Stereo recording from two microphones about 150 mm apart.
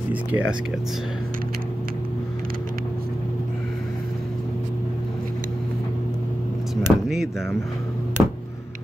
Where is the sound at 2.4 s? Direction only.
75° right (ahead or behind).